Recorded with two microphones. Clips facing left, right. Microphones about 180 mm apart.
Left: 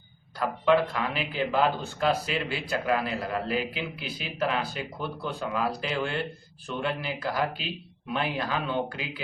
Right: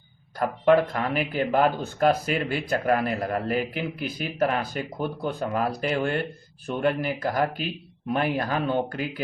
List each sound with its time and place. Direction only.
0.3 s a man's voice: 45° right (ahead or behind)